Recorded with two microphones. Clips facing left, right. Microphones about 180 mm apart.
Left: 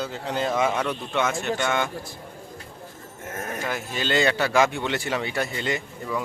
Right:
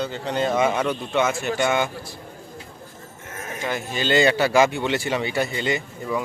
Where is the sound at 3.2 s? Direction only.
50° left (ahead or behind).